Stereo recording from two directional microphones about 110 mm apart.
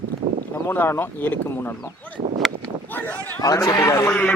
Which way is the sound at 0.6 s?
20° left (ahead or behind).